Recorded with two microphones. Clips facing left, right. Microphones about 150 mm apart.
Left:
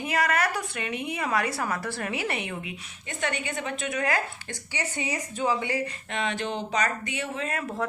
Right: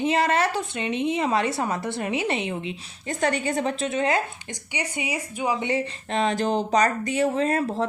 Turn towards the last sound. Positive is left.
turn(degrees=-30)  # may be behind; listen again after turning